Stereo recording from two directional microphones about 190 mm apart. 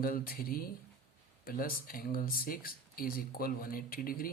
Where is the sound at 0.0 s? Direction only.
50° left (ahead or behind).